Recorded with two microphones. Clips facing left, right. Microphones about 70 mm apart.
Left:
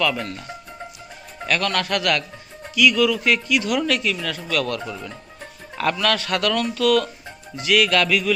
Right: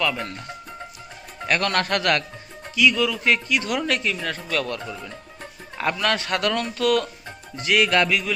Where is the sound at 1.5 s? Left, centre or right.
Right.